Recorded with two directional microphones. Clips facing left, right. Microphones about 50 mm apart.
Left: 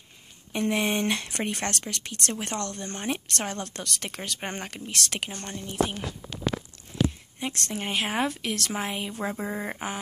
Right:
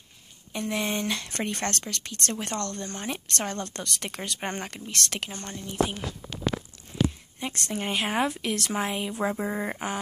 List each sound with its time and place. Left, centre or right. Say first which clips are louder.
0.5 s speech: left 3 dB; left; by 5.3 s centre
5.4 s speech: left 1 dB; centre
7.5 s speech: right 1 dB; centre
7.8 s speech: right 1 dB; centre